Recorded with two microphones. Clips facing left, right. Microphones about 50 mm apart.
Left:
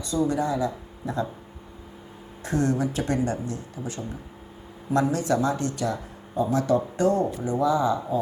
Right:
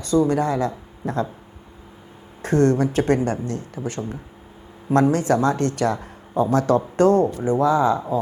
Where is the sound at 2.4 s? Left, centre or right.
Right.